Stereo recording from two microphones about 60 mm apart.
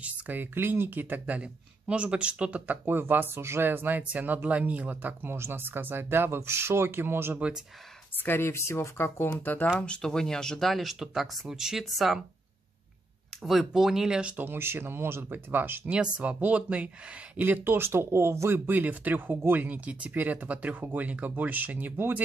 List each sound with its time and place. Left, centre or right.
0.0 s speech: right
8.2 s speech: left
9.4 s speech: left
10.0 s speech: centre
13.4 s speech: centre
14.3 s speech: right
15.9 s speech: right
17.4 s speech: right
18.5 s speech: right